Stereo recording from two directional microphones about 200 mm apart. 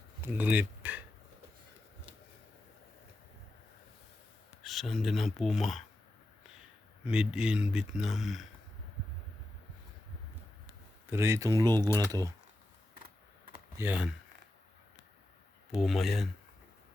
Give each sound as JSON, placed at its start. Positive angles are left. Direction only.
{"t": 0.2, "sound": "speech", "side_deg": -10}
{"t": 4.6, "sound": "speech", "side_deg": 0}
{"t": 7.0, "sound": "speech", "side_deg": -5}
{"t": 11.1, "sound": "speech", "side_deg": -15}
{"t": 13.7, "sound": "speech", "side_deg": -10}
{"t": 15.8, "sound": "speech", "side_deg": 0}